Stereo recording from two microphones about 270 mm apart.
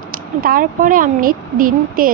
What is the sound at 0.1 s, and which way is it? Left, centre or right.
A woman's voice, right.